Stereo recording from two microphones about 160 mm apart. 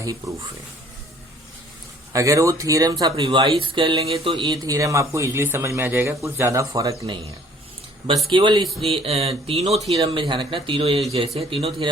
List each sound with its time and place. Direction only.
2.1 s speech: 20° right (ahead or behind)
8.3 s speech: 30° right (ahead or behind)